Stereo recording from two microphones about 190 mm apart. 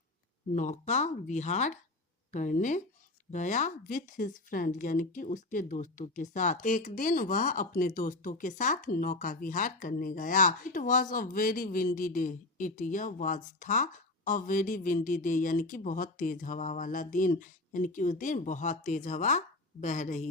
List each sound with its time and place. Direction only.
0.5 s speech: 40° left (ahead or behind)